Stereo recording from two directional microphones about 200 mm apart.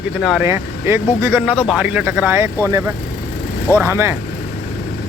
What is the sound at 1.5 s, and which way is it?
Speech, 25° left (ahead or behind).